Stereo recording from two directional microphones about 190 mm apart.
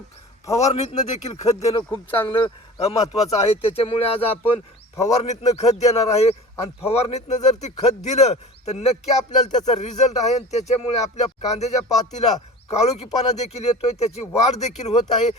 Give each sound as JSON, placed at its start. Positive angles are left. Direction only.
{"t": 0.6, "sound": "speech", "side_deg": 30}
{"t": 1.4, "sound": "speech", "side_deg": 15}
{"t": 2.2, "sound": "speech", "side_deg": 25}